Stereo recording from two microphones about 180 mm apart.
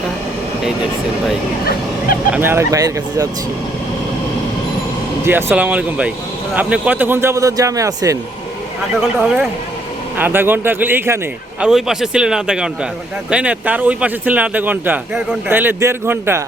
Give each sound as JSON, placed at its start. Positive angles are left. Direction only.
{"t": 2.3, "sound": "speech", "side_deg": -10}
{"t": 5.2, "sound": "speech", "side_deg": -15}
{"t": 9.2, "sound": "a man's voice", "side_deg": -5}
{"t": 11.6, "sound": "a man's voice", "side_deg": 0}